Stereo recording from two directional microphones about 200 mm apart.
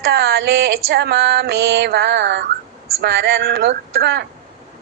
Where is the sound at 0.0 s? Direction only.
50° right (ahead or behind).